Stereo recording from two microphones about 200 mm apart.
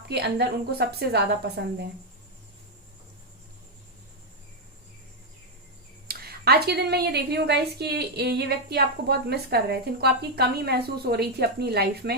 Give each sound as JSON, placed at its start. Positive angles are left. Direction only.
{"t": 0.1, "sound": "a woman's voice", "side_deg": -55}
{"t": 6.1, "sound": "a woman's voice", "side_deg": -50}